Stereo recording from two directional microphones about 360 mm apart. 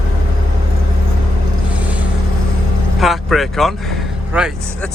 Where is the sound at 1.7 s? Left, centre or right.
Centre.